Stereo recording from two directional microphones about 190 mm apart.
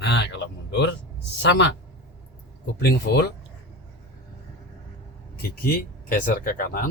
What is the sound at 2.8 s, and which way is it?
Speech, 55° left (ahead or behind).